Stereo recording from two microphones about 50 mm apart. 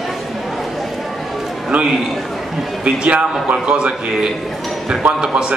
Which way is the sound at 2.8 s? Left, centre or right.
Right.